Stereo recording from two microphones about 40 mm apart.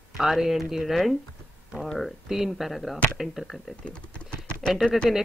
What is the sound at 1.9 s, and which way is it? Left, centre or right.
Speech, centre.